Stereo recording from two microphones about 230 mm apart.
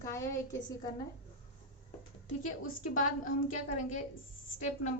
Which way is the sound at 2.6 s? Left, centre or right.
Left.